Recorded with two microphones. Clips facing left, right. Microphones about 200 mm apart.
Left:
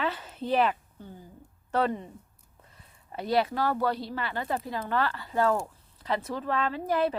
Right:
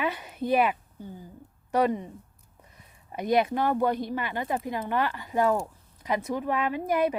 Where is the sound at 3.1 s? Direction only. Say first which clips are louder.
Right 2 dB; 15° right (ahead or behind).